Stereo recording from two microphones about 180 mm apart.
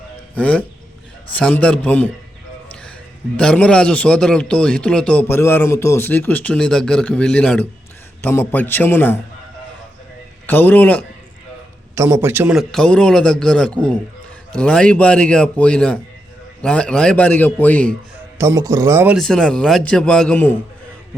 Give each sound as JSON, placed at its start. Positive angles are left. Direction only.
{"t": 0.3, "sound": "a man's voice", "side_deg": 5}
{"t": 3.3, "sound": "a man's voice", "side_deg": 5}
{"t": 10.4, "sound": "a man's voice", "side_deg": 10}
{"t": 11.9, "sound": "a man's voice", "side_deg": -15}
{"t": 18.3, "sound": "speech", "side_deg": -15}
{"t": 19.1, "sound": "a man's voice", "side_deg": 0}